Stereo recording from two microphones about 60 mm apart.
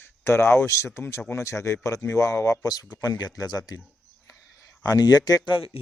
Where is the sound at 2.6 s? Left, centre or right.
Left.